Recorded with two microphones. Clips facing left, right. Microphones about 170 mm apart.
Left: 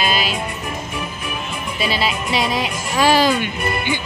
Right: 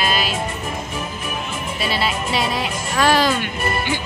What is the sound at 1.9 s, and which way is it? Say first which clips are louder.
Speech: left 1 dB; centre (ahead or behind).